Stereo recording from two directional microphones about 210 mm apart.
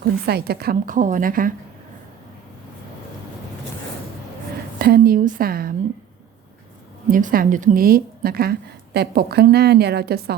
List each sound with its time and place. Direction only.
0.0 s a woman's voice: 50° right (ahead or behind)
4.8 s a woman's voice: 45° right (ahead or behind)
7.1 s a woman's voice: 40° right (ahead or behind)